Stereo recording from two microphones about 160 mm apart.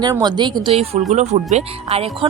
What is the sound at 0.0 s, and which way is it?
Speech, 25° right (ahead or behind).